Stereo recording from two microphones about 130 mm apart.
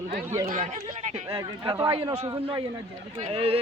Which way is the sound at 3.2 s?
50° right (ahead or behind).